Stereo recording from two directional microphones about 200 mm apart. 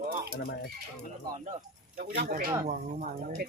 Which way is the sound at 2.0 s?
50° right (ahead or behind).